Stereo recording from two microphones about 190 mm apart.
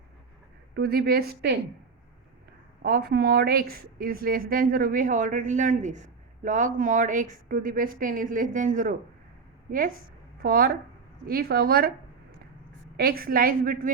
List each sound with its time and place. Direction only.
0.7 s a woman's voice: 55° right (ahead or behind)
2.8 s a woman's voice: 50° right (ahead or behind)
10.4 s a woman's voice: 50° right (ahead or behind)
13.0 s a woman's voice: 50° right (ahead or behind)